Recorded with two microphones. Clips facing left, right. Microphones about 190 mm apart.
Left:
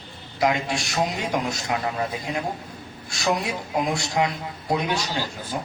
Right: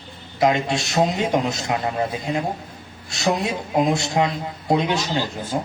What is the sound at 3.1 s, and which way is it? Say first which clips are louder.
Speech: right 3 dB; 25° right (ahead or behind).